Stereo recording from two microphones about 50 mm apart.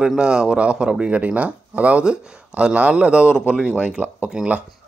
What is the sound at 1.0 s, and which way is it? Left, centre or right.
Speech, right.